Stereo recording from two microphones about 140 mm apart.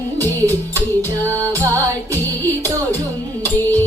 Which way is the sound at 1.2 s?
20° right (ahead or behind).